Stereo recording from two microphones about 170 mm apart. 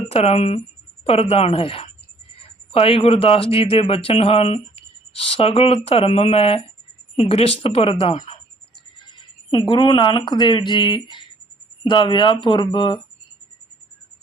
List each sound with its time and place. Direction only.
0.1 s speech: 35° left (ahead or behind)
9.5 s speech: 30° left (ahead or behind)